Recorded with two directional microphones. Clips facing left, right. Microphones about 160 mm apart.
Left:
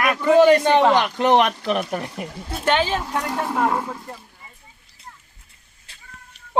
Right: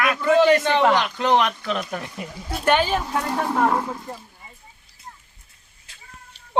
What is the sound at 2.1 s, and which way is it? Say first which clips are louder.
Speech: left 2 dB; 55° left (ahead or behind).